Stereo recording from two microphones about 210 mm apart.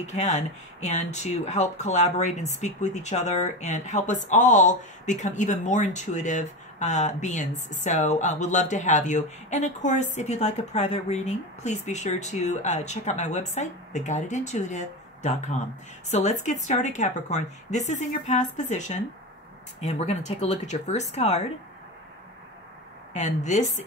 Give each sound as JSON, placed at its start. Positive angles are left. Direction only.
{"t": 0.0, "sound": "speech", "side_deg": 30}
{"t": 23.1, "sound": "speech", "side_deg": 35}